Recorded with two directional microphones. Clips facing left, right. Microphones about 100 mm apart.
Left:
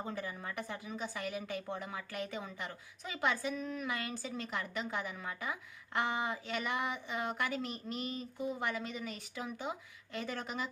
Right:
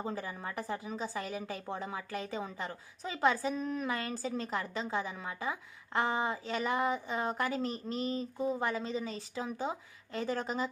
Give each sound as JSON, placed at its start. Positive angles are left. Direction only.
{"t": 0.0, "sound": "a woman's voice", "side_deg": -30}